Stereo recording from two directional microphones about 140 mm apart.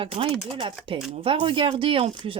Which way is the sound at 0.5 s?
35° right (ahead or behind).